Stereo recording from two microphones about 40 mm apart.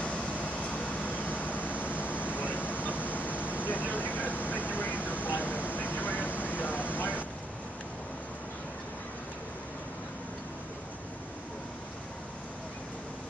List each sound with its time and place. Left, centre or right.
0.0 s vehicle: left